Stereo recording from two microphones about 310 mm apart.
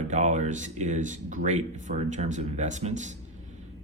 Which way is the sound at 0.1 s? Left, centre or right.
Right.